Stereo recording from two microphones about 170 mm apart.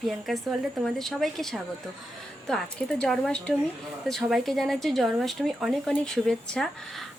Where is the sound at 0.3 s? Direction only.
Centre (ahead or behind).